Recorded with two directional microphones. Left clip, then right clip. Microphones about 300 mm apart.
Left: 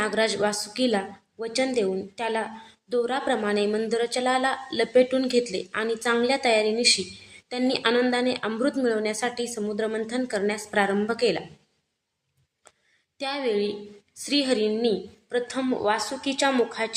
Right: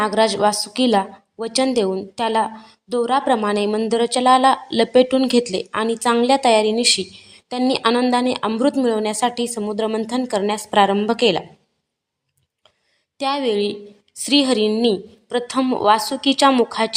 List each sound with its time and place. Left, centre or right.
0.0 s speech: right
13.1 s speech: right